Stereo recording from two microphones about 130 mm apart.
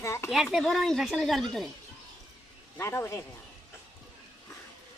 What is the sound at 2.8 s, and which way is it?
Speech, 20° left (ahead or behind).